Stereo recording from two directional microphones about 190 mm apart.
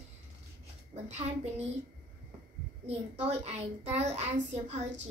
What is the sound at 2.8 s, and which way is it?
A child's voice, 35° right (ahead or behind).